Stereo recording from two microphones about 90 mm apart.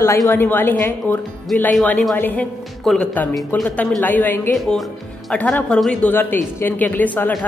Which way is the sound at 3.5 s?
20° left (ahead or behind).